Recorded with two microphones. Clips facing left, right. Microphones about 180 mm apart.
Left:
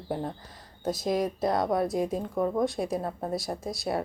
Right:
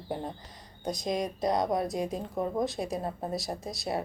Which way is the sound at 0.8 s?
5° left (ahead or behind).